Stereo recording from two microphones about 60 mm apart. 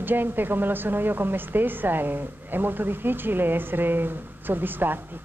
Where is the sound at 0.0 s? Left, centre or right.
Right.